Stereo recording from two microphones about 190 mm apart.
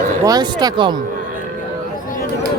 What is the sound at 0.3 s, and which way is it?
Speech, 20° right (ahead or behind).